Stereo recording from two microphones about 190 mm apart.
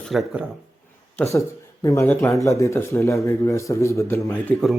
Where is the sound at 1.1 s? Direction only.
15° left (ahead or behind).